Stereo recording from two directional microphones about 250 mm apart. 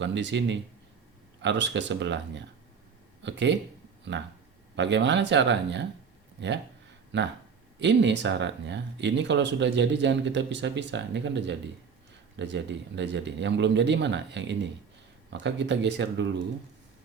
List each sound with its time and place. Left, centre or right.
0.0 s speech: right
4.7 s speech: right
7.1 s speech: right